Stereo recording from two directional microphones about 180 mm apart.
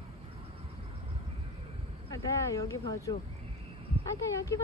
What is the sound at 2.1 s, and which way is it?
Speech, 20° left (ahead or behind).